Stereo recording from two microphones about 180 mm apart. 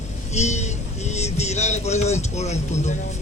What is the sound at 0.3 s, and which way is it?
Speech, 40° left (ahead or behind).